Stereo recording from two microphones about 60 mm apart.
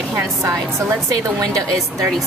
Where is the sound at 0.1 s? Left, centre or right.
Right.